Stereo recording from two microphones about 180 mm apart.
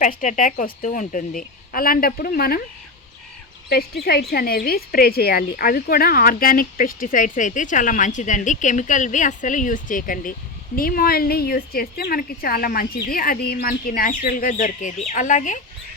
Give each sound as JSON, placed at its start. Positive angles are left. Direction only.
{"t": 0.0, "sound": "speech", "side_deg": 45}
{"t": 3.7, "sound": "a woman's voice", "side_deg": 60}